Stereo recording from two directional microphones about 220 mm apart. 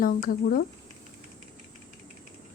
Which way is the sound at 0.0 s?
40° left (ahead or behind).